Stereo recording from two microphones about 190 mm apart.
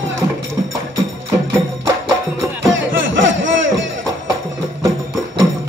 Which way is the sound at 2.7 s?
90° right.